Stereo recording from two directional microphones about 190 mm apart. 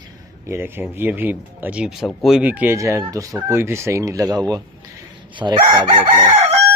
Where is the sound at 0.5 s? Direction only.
10° right (ahead or behind).